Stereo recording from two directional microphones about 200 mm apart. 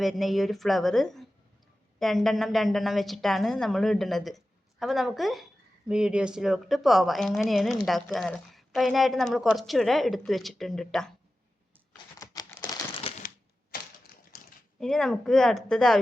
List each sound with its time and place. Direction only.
0.0 s a woman's voice: centre (ahead or behind)
12.2 s crumpling: 15° left (ahead or behind)
13.7 s typewriter: 50° left (ahead or behind)
14.8 s a woman's voice: centre (ahead or behind)